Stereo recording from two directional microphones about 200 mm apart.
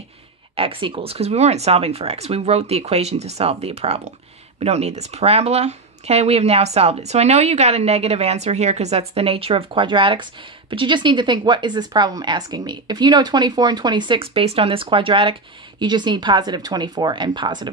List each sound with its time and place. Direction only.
0.6 s speech: 25° right (ahead or behind)